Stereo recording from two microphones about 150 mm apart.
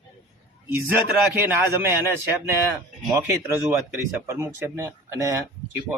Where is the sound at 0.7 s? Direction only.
15° right (ahead or behind).